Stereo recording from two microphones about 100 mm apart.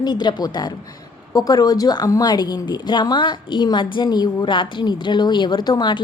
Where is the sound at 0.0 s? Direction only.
45° left (ahead or behind).